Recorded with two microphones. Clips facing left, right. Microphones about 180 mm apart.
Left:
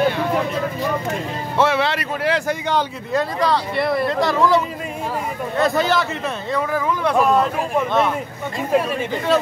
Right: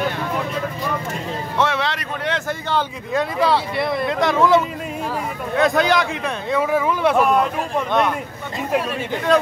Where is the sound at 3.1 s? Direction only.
Centre (ahead or behind).